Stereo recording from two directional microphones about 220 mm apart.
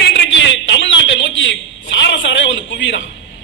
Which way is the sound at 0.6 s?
55° left (ahead or behind).